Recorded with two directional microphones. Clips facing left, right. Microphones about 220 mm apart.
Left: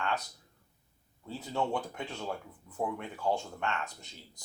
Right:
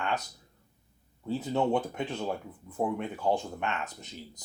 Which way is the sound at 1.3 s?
20° right (ahead or behind).